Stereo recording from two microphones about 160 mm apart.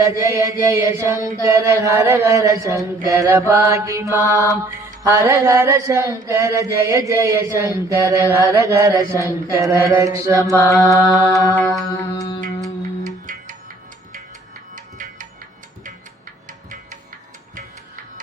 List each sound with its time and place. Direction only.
0.0 s chant: 20° right (ahead or behind)
7.1 s speech: 15° right (ahead or behind)
7.9 s chant: 20° right (ahead or behind)
10.5 s mantra: 15° left (ahead or behind)
14.9 s music: 50° right (ahead or behind)
16.5 s music: 55° right (ahead or behind)